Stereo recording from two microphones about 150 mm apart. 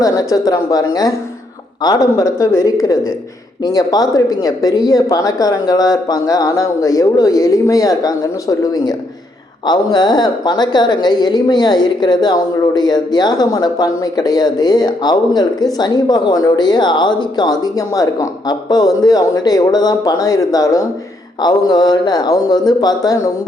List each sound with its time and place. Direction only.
0.0 s a woman's voice: 25° left (ahead or behind)